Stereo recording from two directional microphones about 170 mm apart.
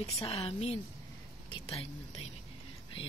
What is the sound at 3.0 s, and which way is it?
Speech, 30° left (ahead or behind).